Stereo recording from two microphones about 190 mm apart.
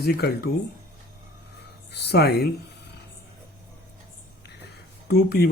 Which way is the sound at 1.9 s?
60° left (ahead or behind).